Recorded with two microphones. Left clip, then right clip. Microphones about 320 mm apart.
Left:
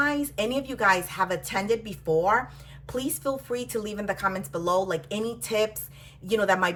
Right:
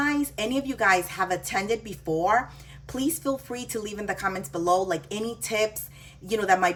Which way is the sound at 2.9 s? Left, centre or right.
Centre.